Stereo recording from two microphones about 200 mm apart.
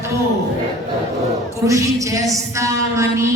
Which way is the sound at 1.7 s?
15° right (ahead or behind).